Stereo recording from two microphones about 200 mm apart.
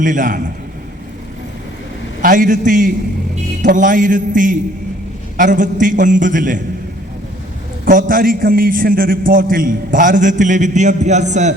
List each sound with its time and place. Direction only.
0.0 s a man's voice: 40° right (ahead or behind)
2.2 s a man's voice: 40° right (ahead or behind)
7.9 s a man's voice: 45° right (ahead or behind)